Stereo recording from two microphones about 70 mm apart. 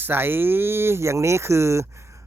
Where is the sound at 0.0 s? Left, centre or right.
Right.